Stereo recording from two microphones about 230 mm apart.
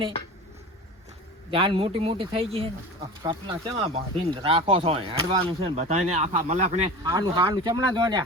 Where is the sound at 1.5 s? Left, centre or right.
Right.